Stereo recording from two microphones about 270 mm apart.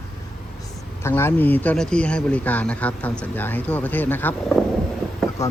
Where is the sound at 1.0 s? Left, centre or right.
Centre.